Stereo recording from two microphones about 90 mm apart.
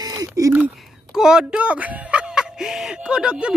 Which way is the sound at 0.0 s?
45° right (ahead or behind).